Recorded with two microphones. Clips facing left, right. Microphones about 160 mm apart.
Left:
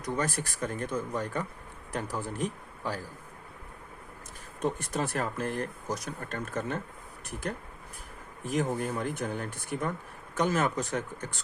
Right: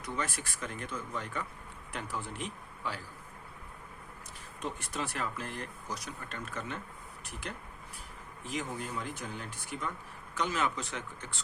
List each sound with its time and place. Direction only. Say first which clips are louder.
0.0 s a man's voice: left 6 dB; 40° left (ahead or behind)
4.6 s speech: left 7 dB; 45° left (ahead or behind)